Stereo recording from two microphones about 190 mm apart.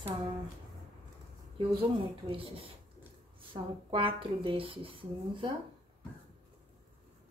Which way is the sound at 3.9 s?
30° right (ahead or behind).